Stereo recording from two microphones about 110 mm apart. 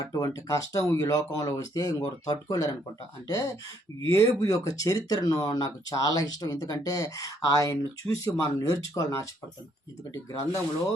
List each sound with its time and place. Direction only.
0.0 s speech: 35° left (ahead or behind)